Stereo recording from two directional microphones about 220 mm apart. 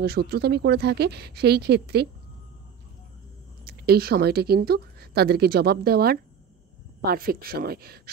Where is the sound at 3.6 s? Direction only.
45° right (ahead or behind).